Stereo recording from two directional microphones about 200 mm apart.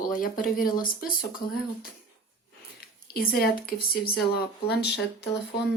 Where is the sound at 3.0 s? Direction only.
50° left (ahead or behind).